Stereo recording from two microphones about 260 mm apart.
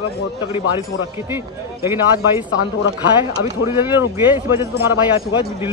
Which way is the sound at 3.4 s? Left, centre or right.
Centre.